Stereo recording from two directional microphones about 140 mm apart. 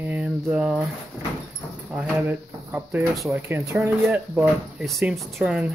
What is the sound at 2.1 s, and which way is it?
Speech, 15° right (ahead or behind).